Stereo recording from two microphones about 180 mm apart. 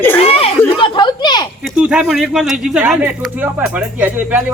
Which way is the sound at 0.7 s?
25° left (ahead or behind).